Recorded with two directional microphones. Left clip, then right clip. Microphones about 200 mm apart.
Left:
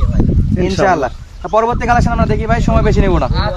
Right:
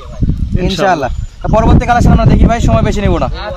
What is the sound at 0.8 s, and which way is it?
Speech, 50° right (ahead or behind).